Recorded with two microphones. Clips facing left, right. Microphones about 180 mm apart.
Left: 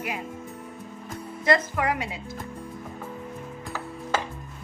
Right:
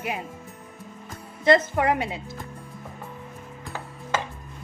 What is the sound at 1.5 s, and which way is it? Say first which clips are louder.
Speech: right 4 dB; 30° right (ahead or behind).